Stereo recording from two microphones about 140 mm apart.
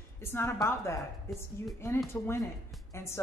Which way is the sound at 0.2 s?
15° left (ahead or behind).